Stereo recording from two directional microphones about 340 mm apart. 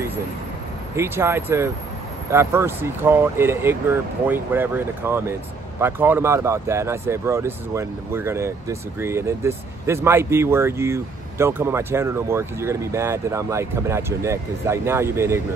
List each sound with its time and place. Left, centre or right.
0.9 s speech: centre